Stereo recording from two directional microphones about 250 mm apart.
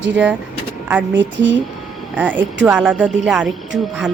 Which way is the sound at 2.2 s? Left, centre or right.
Centre.